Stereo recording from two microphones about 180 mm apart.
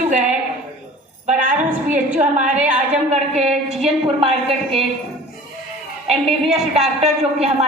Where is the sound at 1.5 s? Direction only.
10° right (ahead or behind).